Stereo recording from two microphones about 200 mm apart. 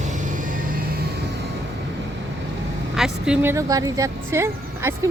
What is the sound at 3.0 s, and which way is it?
A woman's voice, 5° right (ahead or behind).